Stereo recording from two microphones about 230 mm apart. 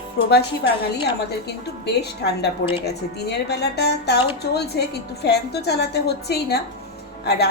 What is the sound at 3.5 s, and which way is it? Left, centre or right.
A woman's voice, left.